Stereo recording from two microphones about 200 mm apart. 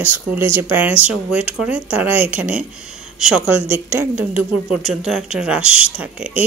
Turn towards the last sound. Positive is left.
turn(degrees=-5)  # may be behind; listen again after turning